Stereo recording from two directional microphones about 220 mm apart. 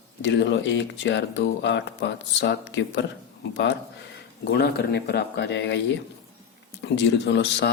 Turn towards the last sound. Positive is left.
turn(degrees=50)  # may be behind; listen again after turning